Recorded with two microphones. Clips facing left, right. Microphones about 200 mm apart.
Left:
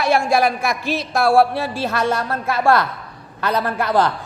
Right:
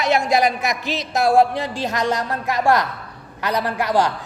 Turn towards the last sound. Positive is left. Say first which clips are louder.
# left 1 dB
turn(degrees=-15)  # may be behind; listen again after turning